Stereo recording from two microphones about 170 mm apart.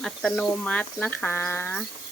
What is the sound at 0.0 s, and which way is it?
Speech, 5° left (ahead or behind).